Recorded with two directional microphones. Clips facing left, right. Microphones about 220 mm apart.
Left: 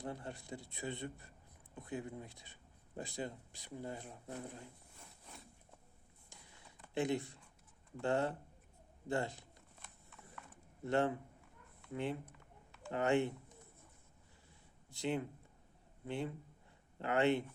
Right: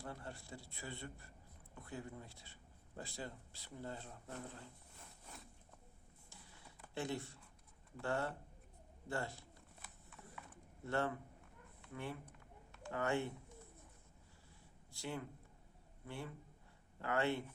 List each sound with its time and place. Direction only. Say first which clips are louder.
0.0 s a man's voice: left 5 dB; 20° left (ahead or behind)
6.9 s a man's voice: left 6 dB; 15° left (ahead or behind)
9.8 s horse: right 1 dB; centre (ahead or behind)
10.8 s speech: left 5 dB; 20° left (ahead or behind)
12.9 s a man's voice: left 5 dB; 20° left (ahead or behind)
14.8 s a man's voice: left 7 dB; 20° left (ahead or behind)